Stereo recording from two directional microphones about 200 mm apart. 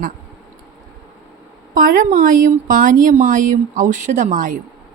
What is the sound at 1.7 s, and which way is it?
A woman's voice, 45° right (ahead or behind).